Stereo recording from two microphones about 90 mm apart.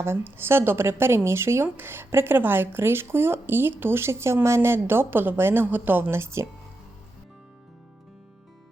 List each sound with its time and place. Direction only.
0.0 s speech: 25° right (ahead or behind)